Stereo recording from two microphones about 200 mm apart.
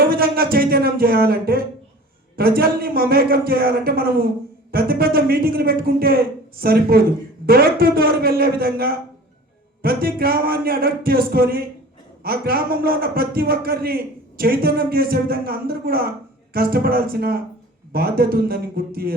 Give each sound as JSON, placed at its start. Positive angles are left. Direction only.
{"t": 0.1, "sound": "a man's voice", "side_deg": -50}